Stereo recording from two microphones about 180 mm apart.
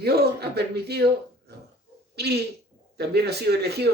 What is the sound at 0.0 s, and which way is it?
Speech, 60° right (ahead or behind).